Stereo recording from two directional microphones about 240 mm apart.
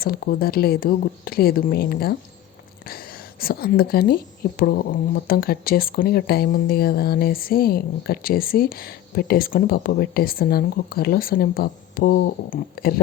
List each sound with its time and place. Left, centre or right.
0.0 s a woman's voice: left